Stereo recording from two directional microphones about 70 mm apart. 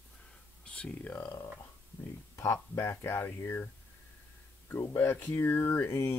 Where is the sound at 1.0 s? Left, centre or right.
Left.